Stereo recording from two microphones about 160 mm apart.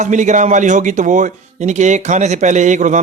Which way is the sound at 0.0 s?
50° right (ahead or behind).